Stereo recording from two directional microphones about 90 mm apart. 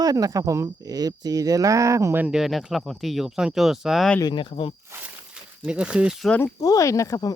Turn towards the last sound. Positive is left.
turn(degrees=40)  # may be behind; listen again after turning